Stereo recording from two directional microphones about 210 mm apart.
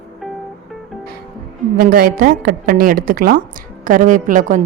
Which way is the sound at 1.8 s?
45° right (ahead or behind).